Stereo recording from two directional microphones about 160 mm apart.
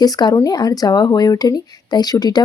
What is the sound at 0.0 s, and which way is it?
Speech, 25° left (ahead or behind).